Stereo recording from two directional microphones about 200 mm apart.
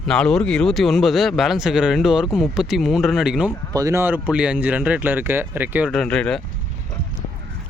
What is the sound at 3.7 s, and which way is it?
Speech, 15° right (ahead or behind).